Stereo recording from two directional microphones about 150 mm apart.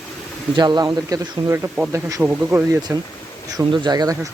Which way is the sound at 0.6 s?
30° right (ahead or behind).